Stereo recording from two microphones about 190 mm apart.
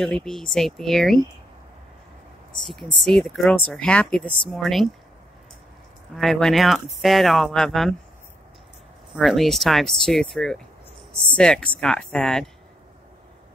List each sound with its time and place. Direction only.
0.0 s speech: 5° left (ahead or behind)
2.6 s speech: centre (ahead or behind)
6.1 s speech: centre (ahead or behind)
9.1 s speech: centre (ahead or behind)